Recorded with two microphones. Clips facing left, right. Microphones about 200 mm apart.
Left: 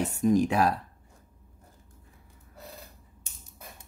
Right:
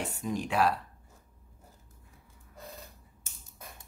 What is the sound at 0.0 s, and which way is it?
Speech, 45° left (ahead or behind).